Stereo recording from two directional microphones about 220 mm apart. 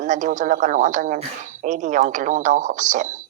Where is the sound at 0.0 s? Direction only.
35° right (ahead or behind).